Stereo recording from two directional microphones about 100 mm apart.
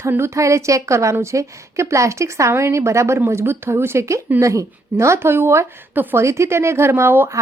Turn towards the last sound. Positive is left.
turn(degrees=-25)  # may be behind; listen again after turning